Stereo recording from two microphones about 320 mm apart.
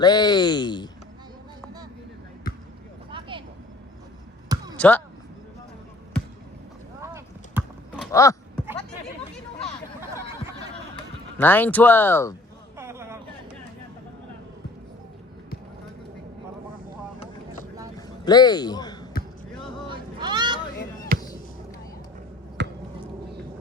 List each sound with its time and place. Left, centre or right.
0.0 s speech: centre
3.1 s vehicle: centre
4.4 s basketball bounce: centre
4.8 s speech: centre
7.0 s clip-clop: centre
8.1 s speech: centre
11.3 s speech: centre
12.7 s a sound: centre
18.3 s speech: centre
19.9 s a sound: centre
21.1 s basketball bounce: right
22.6 s a sound: right